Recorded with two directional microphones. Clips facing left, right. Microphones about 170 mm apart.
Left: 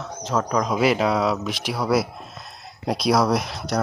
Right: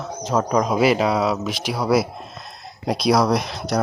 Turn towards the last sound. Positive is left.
turn(degrees=0)  # may be behind; listen again after turning